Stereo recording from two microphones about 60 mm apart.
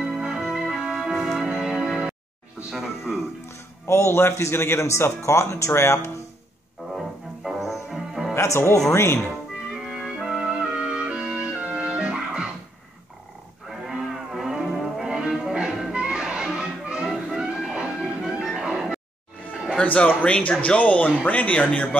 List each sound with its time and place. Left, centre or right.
0.0 s music: centre
2.7 s speech: centre
3.8 s speech: left
7.4 s music: centre
8.4 s speech: left
9.7 s music: centre
13.7 s music: centre
19.5 s a sound: centre
19.8 s speech: left